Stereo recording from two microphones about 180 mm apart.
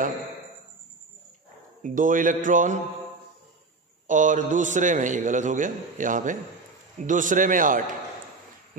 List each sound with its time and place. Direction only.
1.8 s a man's voice: 45° right (ahead or behind)
4.1 s a man's voice: 45° right (ahead or behind)